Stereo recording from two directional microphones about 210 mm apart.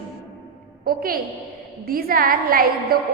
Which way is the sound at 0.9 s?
45° right (ahead or behind).